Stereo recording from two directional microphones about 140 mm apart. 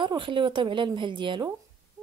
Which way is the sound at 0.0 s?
35° right (ahead or behind).